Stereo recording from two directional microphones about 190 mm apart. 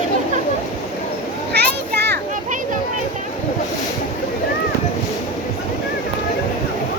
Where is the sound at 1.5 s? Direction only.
60° right (ahead or behind).